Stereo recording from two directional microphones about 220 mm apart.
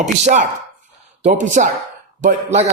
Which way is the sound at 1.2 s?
30° right (ahead or behind).